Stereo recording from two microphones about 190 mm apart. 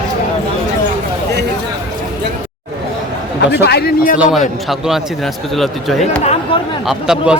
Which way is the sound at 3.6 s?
55° left (ahead or behind).